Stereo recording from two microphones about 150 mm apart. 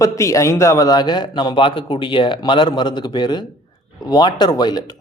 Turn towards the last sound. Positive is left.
turn(degrees=30)  # may be behind; listen again after turning